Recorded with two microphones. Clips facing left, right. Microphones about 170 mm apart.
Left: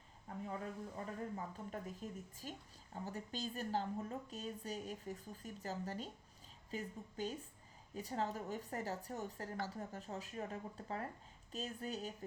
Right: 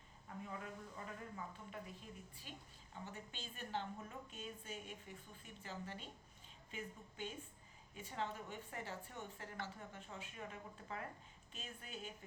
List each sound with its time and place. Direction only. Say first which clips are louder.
0.4 s speech: left 6 dB; 35° left (ahead or behind)